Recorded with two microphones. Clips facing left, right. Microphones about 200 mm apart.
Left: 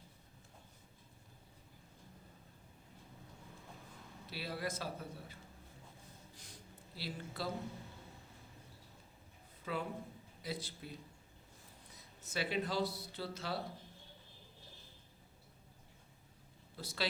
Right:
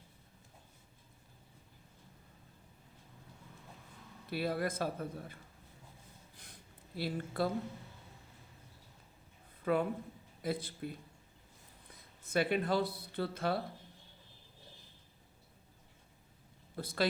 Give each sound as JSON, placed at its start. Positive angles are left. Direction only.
{"t": 4.3, "sound": "a man's voice", "side_deg": -55}
{"t": 6.3, "sound": "a sound", "side_deg": -55}
{"t": 9.7, "sound": "a man's voice", "side_deg": -55}
{"t": 16.7, "sound": "a man's voice", "side_deg": -55}